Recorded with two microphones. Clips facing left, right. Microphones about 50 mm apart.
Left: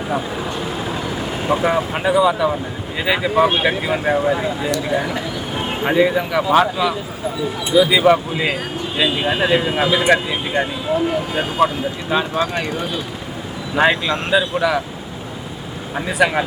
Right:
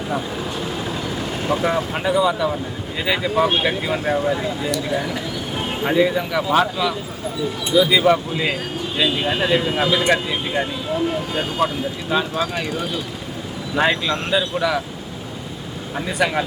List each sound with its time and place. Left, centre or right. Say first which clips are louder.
0.1 s speech: left 3 dB; centre
0.6 s vehicle: left 2 dB; centre
3.0 s speech: left 3 dB; centre
16.0 s speech: left 4 dB; centre